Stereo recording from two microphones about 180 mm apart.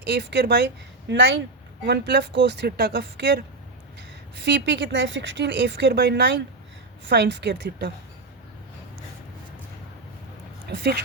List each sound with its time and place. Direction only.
0.0 s speech: 70° right (ahead or behind); by 1.4 s 90° right
1.9 s speech: 70° right (ahead or behind)
10.7 s speech: 70° right (ahead or behind)